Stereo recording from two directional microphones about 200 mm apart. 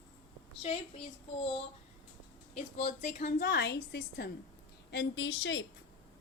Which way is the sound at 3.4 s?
60° left (ahead or behind).